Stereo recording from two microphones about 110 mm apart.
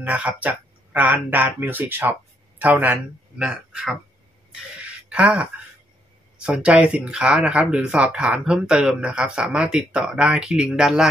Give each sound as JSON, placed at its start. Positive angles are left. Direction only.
{"t": 0.0, "sound": "speech", "side_deg": -10}
{"t": 4.8, "sound": "a sound", "side_deg": -10}
{"t": 6.3, "sound": "speech", "side_deg": -10}